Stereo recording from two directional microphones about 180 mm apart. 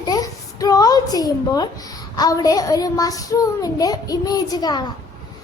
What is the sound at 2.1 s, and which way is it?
A child's voice, 20° left (ahead or behind).